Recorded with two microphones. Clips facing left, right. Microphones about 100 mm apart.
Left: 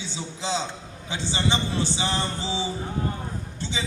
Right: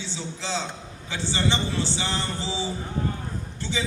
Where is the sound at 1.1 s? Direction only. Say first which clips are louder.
Even; 20° left (ahead or behind).